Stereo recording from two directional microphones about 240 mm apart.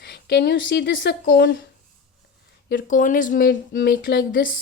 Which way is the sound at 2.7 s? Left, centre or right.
Left.